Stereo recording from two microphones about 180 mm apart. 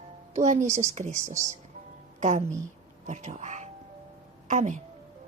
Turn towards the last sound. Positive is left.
turn(degrees=-45)  # may be behind; listen again after turning